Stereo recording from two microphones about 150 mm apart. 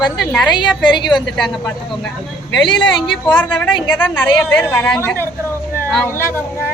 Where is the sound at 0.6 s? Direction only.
30° left (ahead or behind).